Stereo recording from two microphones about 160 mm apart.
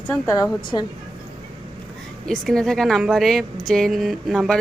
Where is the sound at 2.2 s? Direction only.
5° left (ahead or behind).